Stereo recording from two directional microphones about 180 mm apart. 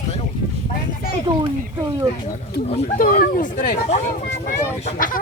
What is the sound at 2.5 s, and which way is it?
Speech, 50° left (ahead or behind).